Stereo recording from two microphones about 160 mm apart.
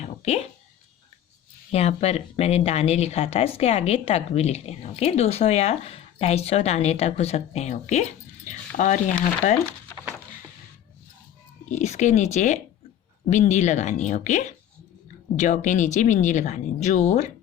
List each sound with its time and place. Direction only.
0.0 s a sound: 45° left (ahead or behind)
1.7 s speech: 40° left (ahead or behind)
11.7 s speech: 45° left (ahead or behind)